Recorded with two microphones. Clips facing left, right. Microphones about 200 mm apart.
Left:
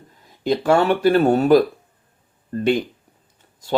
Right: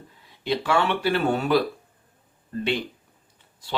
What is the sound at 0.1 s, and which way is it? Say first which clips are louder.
Speech: left 6 dB; 45° left (ahead or behind).